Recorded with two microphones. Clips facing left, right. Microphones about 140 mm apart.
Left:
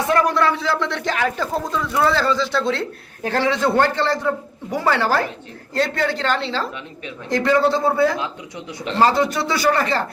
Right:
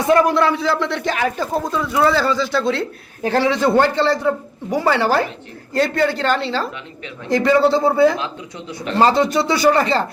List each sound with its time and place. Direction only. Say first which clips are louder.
0.1 s a man's voice: right 4 dB; 15° right (ahead or behind)
5.7 s a woman's voice: right 3 dB; 5° right (ahead or behind)